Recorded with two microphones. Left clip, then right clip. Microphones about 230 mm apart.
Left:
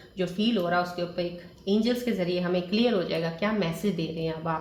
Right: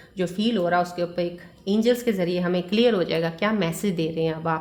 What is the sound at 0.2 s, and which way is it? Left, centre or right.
A woman's voice, right.